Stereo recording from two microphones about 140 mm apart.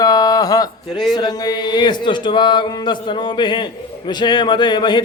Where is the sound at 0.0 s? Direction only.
30° left (ahead or behind).